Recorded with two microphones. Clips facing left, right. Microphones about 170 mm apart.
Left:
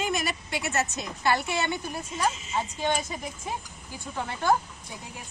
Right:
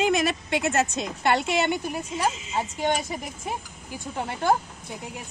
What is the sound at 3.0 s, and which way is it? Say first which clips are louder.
Speech: right 2 dB; 15° right (ahead or behind).